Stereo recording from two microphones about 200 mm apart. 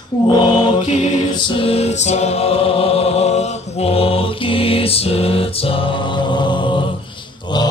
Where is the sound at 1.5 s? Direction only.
30° left (ahead or behind).